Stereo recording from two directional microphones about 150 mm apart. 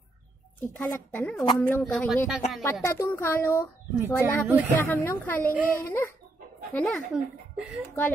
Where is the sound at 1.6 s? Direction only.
10° left (ahead or behind).